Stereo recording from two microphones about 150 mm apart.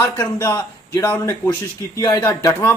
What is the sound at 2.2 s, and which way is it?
Speech, 15° left (ahead or behind).